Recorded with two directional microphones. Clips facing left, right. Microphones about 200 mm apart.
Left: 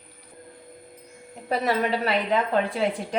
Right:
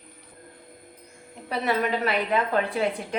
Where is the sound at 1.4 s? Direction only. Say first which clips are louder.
Left 2 dB; 40° left (ahead or behind).